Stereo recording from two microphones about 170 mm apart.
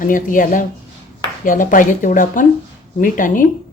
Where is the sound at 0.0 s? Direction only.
50° left (ahead or behind).